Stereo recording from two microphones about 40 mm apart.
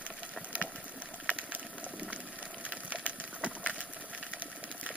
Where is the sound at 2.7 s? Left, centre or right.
Right.